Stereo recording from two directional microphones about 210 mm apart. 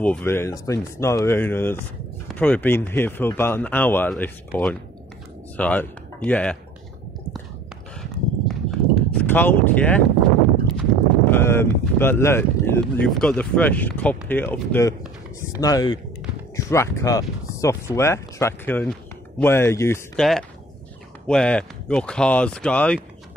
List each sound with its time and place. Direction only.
0.0 s speech: 10° left (ahead or behind)
8.5 s clip-clop: 5° left (ahead or behind)
10.8 s speech: 10° left (ahead or behind)
21.3 s speech: 5° left (ahead or behind)